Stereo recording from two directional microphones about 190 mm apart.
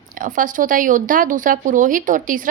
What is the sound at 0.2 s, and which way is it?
A woman's voice, 45° right (ahead or behind).